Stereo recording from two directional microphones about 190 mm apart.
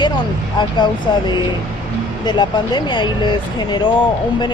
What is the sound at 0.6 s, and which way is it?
Speech, 25° left (ahead or behind).